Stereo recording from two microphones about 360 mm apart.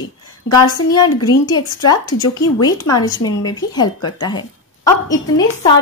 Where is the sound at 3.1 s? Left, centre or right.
Left.